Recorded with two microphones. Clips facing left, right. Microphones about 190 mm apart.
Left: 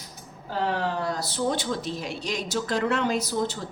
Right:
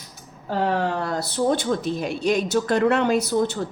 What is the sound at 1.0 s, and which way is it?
A woman's voice, 60° right (ahead or behind).